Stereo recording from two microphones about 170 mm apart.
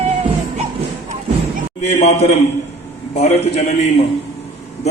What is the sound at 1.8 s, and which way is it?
A man's voice, 40° left (ahead or behind).